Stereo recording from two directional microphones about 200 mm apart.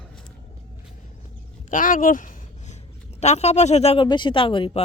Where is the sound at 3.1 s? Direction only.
35° left (ahead or behind).